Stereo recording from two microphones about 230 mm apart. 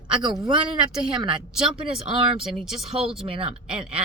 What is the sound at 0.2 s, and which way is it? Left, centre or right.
Speech, centre.